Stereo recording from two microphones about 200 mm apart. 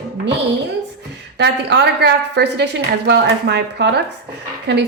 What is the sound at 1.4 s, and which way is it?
Speech, 55° right (ahead or behind).